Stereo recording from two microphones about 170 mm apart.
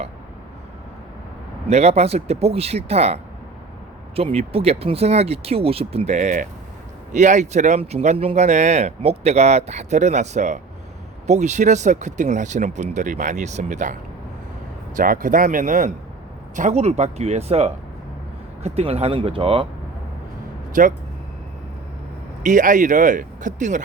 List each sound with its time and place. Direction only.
1.6 s speech: 40° right (ahead or behind)
14.9 s speech: 55° right (ahead or behind); by 19.6 s 30° right (ahead or behind)
22.4 s speech: 50° right (ahead or behind)